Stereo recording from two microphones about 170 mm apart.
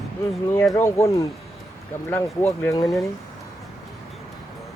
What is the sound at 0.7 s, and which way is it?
Speech, 15° left (ahead or behind).